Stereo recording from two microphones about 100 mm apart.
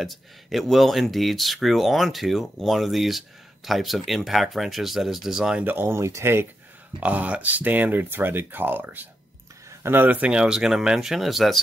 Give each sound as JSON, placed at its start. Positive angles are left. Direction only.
{"t": 0.0, "sound": "speech", "side_deg": 0}
{"t": 7.0, "sound": "speech", "side_deg": -15}